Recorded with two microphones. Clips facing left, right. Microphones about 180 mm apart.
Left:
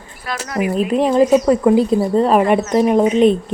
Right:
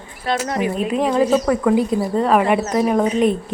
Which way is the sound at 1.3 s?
20° left (ahead or behind).